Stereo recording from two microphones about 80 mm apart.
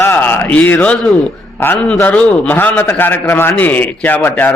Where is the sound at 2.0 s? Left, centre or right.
Centre.